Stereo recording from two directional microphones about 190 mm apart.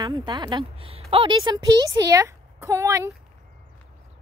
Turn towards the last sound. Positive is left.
turn(degrees=-15)  # may be behind; listen again after turning